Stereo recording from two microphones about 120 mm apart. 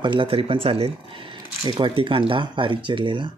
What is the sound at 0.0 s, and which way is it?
Speech, 45° right (ahead or behind).